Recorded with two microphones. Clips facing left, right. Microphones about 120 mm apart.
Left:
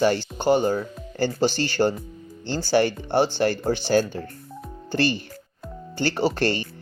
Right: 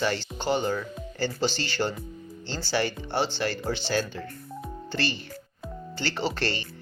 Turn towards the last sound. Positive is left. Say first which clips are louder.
# left 6 dB
turn(degrees=45)  # may be behind; listen again after turning